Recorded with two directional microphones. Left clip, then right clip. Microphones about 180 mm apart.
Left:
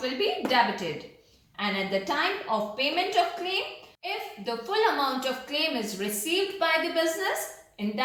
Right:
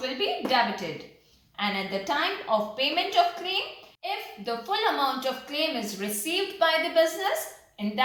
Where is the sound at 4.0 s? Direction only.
25° right (ahead or behind).